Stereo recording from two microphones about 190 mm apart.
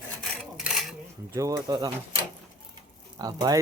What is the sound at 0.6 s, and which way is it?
Dishes, centre (ahead or behind).